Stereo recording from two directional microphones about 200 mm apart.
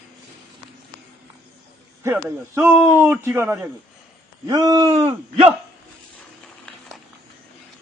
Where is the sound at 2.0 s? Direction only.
10° right (ahead or behind).